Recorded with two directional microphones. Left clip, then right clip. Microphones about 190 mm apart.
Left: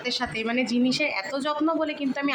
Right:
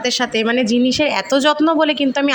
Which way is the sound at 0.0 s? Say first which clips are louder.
Right 10 dB; 40° right (ahead or behind).